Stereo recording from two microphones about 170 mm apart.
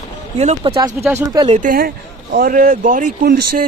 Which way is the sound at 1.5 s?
55° right (ahead or behind).